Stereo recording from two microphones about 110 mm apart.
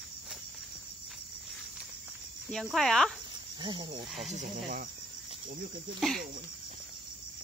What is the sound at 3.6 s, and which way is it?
Speech, 45° right (ahead or behind).